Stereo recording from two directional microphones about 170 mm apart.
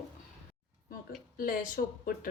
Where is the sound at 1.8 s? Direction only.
65° left (ahead or behind).